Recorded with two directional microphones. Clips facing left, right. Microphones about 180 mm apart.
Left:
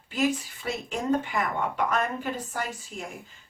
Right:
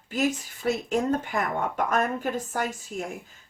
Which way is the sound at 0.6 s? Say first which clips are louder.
Right 4 dB; 45° right (ahead or behind).